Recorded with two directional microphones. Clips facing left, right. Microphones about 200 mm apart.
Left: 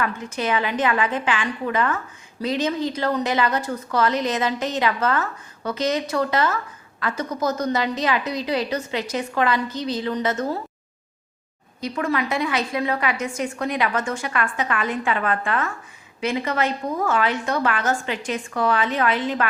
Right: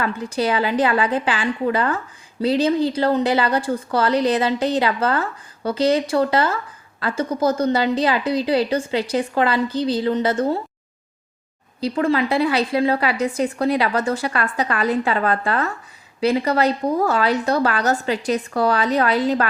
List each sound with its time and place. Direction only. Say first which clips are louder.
0.0 s a woman's voice: right 4 dB; 35° right (ahead or behind)
11.8 s a woman's voice: right 5 dB; 30° right (ahead or behind)